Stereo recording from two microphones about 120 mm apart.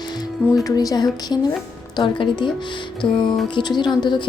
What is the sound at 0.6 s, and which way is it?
A woman's voice, 30° left (ahead or behind).